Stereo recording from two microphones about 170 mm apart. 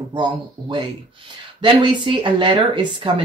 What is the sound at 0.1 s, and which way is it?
Speech, 25° right (ahead or behind).